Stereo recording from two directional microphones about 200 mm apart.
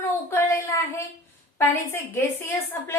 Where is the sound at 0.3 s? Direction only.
10° left (ahead or behind).